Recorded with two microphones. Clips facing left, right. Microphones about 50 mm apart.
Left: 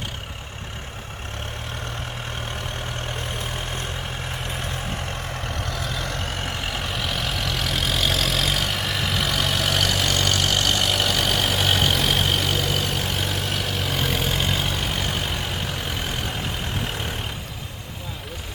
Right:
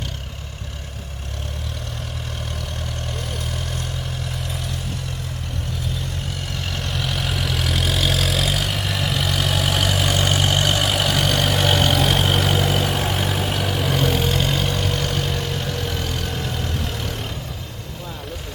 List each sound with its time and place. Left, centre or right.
3.1 s vehicle: left
5.5 s vehicle: left
6.3 s vehicle: left
6.7 s vehicle: centre